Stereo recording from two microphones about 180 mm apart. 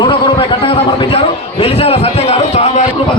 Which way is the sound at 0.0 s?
30° left (ahead or behind).